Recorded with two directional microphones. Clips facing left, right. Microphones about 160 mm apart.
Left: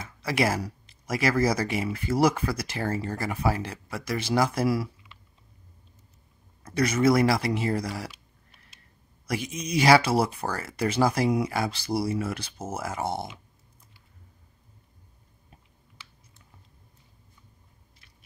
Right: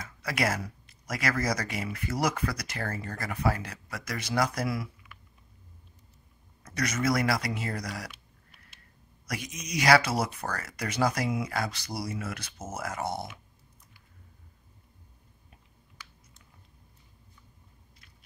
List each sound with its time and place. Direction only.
0.0 s speech: 25° left (ahead or behind)
6.6 s speech: 30° left (ahead or behind)
9.3 s speech: 30° left (ahead or behind)